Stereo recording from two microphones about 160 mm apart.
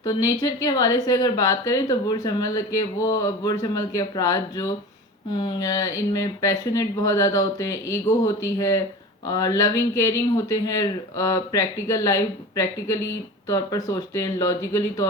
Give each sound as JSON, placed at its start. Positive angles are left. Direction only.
{"t": 0.0, "sound": "speech", "side_deg": 20}